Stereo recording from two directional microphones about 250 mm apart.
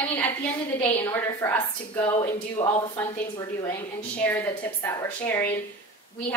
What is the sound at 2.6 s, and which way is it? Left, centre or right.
Speech, centre.